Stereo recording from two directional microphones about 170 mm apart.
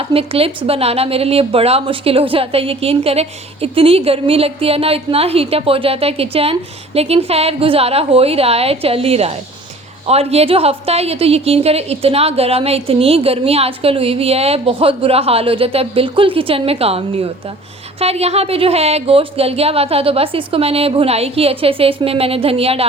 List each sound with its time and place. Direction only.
0.0 s speech: 35° right (ahead or behind)